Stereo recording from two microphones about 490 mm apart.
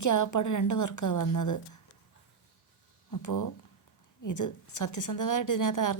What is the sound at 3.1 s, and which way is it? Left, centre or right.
A woman's voice, left.